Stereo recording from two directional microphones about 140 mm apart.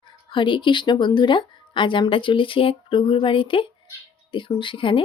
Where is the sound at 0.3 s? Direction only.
35° left (ahead or behind).